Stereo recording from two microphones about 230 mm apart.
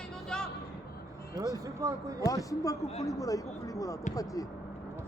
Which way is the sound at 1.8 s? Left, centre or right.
Centre.